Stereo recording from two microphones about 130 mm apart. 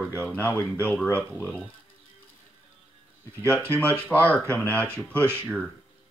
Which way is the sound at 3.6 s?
20° right (ahead or behind).